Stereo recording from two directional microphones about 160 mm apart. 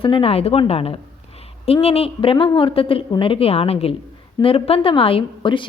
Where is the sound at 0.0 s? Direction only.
35° left (ahead or behind).